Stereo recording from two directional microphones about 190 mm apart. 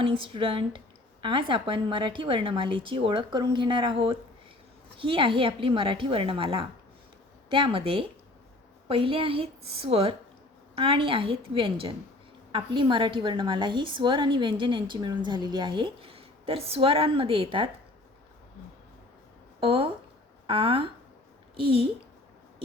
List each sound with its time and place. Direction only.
0.0 s a woman's voice: 25° right (ahead or behind)
19.5 s a woman's voice: 30° right (ahead or behind)